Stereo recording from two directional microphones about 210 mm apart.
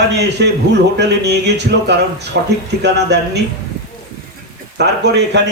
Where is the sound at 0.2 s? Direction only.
55° right (ahead or behind).